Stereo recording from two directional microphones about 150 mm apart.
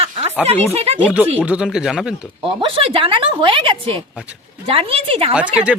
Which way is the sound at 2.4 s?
40° right (ahead or behind).